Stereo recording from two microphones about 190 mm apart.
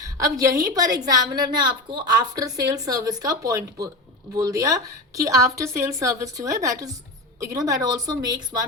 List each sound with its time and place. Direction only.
0.0 s a woman's voice: 20° right (ahead or behind)